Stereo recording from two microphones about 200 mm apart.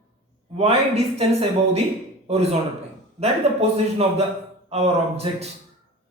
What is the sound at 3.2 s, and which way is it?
A man's voice, 30° right (ahead or behind).